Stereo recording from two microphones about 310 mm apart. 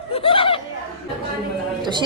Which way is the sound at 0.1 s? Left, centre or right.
Centre.